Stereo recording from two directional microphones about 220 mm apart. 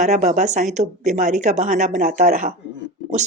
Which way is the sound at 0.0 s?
30° right (ahead or behind).